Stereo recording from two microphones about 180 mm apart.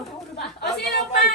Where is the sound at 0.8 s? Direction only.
60° left (ahead or behind).